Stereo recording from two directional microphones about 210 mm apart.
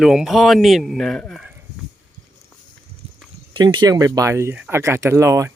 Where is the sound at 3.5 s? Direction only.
20° right (ahead or behind).